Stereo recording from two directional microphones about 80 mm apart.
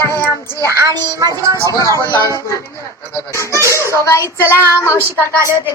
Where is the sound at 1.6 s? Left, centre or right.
Right.